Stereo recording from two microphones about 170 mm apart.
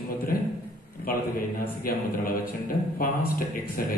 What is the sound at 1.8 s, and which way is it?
A man's voice, 60° left (ahead or behind).